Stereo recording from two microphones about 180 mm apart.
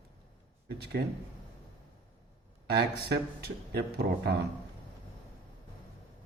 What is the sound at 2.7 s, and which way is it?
Speech, 65° right (ahead or behind).